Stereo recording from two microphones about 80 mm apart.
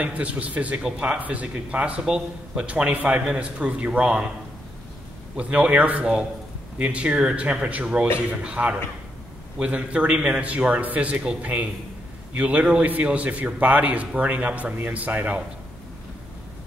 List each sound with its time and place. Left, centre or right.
0.0 s a man's voice: centre
5.3 s a man's voice: centre